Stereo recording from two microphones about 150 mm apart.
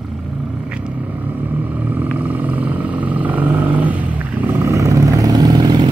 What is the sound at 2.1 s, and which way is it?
Vehicle, 10° right (ahead or behind).